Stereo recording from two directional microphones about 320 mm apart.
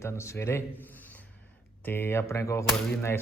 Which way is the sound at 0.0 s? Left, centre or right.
Centre.